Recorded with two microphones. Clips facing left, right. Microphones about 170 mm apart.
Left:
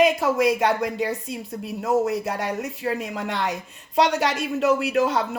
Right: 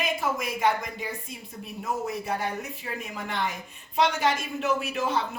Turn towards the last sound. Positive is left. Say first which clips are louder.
# left 6 dB
turn(degrees=90)